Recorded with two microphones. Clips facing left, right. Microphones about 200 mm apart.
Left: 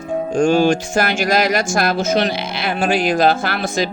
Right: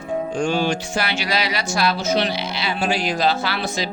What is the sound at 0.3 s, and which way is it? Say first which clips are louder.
Speech: left 9 dB; 45° left (ahead or behind).